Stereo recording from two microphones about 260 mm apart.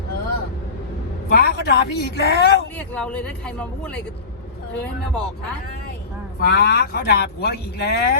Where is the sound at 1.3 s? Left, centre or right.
Left.